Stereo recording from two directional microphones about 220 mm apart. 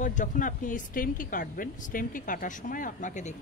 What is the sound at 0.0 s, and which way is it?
A woman's voice, 35° left (ahead or behind).